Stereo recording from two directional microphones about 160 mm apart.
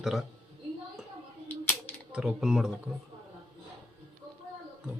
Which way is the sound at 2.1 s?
5° right (ahead or behind).